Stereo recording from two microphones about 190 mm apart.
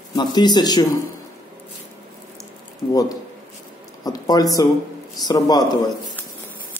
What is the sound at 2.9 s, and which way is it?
Speech, 20° left (ahead or behind).